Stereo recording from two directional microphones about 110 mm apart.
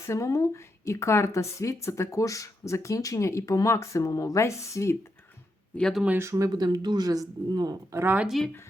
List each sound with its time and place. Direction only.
0.1 s a woman's voice: 30° left (ahead or behind)
5.9 s speech: 5° right (ahead or behind)
6.1 s speech: 30° right (ahead or behind)
7.9 s speech: 15° right (ahead or behind)